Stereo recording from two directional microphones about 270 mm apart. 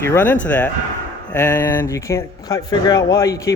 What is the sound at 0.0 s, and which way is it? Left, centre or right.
Speech, centre.